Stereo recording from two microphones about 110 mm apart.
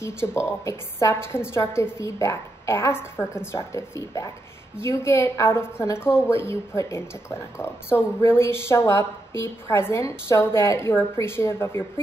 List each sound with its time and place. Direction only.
0.0 s a woman's voice: 25° left (ahead or behind)